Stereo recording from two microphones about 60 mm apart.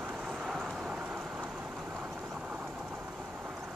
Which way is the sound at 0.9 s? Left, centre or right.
Centre.